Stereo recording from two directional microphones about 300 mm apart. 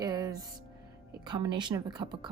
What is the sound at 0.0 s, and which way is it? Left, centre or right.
Music, centre.